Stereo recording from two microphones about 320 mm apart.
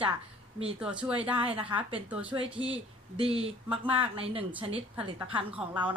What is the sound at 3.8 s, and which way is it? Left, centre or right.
Speech, centre.